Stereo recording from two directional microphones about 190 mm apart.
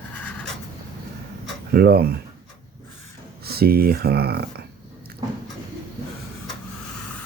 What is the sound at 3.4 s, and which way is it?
Speech, 55° right (ahead or behind).